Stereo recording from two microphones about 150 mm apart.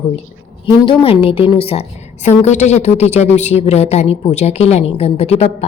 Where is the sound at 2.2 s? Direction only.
50° left (ahead or behind).